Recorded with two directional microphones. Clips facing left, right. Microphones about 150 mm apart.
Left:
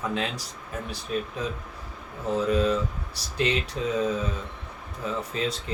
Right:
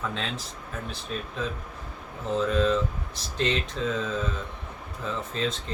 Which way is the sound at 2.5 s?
10° left (ahead or behind).